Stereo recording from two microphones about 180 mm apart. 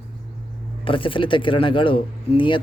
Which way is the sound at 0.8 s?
30° left (ahead or behind).